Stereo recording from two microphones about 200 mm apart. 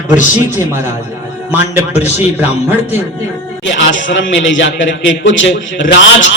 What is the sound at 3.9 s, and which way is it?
A man's voice, 70° left (ahead or behind).